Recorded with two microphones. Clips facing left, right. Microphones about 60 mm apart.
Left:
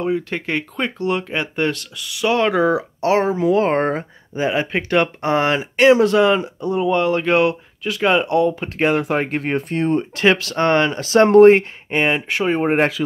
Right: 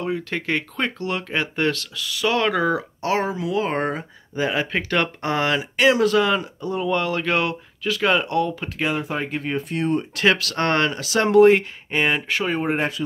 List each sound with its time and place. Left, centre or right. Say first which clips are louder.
0.0 s speech: left 4 dB; centre
3.3 s speech: left 7 dB; left
4.4 s speech: left 3 dB; left
8.7 s speech: left 6 dB; left
9.0 s speech: left 6 dB; left
9.7 s speech: left 4 dB; left
11.0 s speech: left 5 dB; left
11.9 s speech: left 3 dB; left